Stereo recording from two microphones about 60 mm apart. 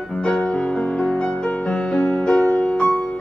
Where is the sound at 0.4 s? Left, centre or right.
Left.